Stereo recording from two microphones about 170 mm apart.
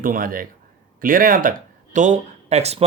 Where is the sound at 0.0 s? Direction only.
55° right (ahead or behind).